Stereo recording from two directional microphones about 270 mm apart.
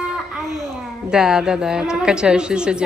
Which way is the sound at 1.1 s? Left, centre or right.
Centre.